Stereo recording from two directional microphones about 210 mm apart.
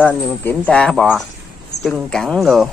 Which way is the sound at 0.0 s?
10° left (ahead or behind).